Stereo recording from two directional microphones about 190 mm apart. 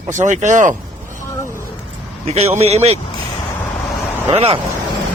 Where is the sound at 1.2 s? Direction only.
15° left (ahead or behind).